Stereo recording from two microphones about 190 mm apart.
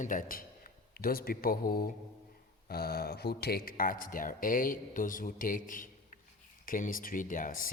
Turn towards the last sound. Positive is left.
turn(degrees=45)  # may be behind; listen again after turning